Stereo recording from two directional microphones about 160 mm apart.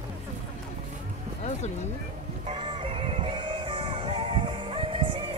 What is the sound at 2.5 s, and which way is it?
Music, 35° right (ahead or behind).